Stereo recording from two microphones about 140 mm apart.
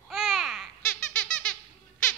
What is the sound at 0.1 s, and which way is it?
Babbling, centre (ahead or behind).